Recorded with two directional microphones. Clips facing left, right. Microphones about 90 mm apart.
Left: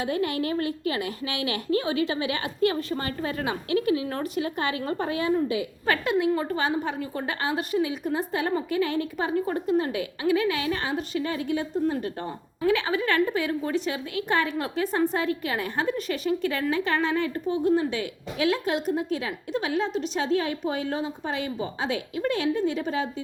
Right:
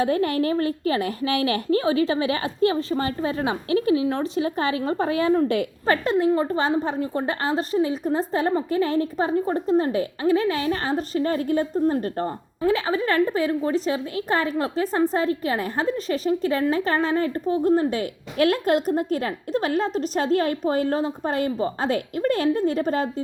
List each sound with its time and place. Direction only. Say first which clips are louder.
0.0 s a woman's voice: right 5 dB; 40° right (ahead or behind)
5.3 s a woman's voice: right 3 dB; 65° right (ahead or behind)
5.8 s a woman's voice: right 3 dB; 35° right (ahead or behind)